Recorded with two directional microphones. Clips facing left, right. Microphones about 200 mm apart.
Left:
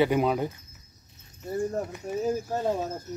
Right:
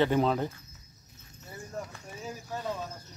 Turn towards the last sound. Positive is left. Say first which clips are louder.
# left 8 dB
turn(degrees=45)  # may be behind; listen again after turning